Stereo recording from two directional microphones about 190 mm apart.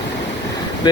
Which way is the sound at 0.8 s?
20° left (ahead or behind).